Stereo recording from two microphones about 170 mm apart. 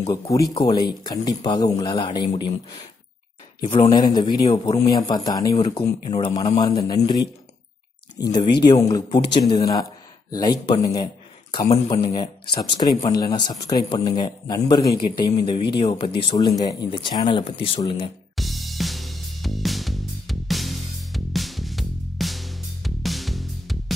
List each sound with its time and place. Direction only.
0.3 s a man's voice: 25° left (ahead or behind)
5.6 s a man's voice: 35° left (ahead or behind)
18.3 s music: centre (ahead or behind)